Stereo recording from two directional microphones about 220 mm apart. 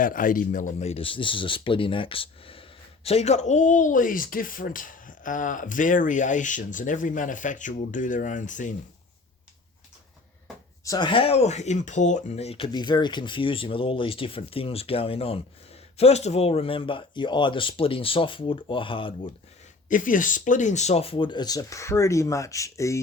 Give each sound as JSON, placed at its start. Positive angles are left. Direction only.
{"t": 0.0, "sound": "speech", "side_deg": 40}
{"t": 10.8, "sound": "speech", "side_deg": 20}
{"t": 19.9, "sound": "speech", "side_deg": 35}